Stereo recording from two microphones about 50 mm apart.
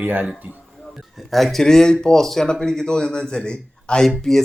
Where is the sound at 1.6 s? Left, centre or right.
Centre.